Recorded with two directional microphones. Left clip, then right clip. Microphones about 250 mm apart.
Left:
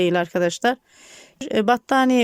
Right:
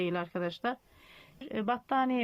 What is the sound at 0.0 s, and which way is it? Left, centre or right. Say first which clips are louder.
A woman's voice: left 14 dB; left.